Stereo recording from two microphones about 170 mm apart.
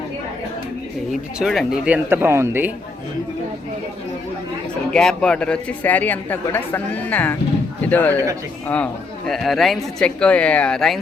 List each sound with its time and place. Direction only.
1.4 s speech: 5° right (ahead or behind)
4.9 s speech: 5° left (ahead or behind)
8.1 s speech: 20° right (ahead or behind)
8.6 s speech: 5° left (ahead or behind)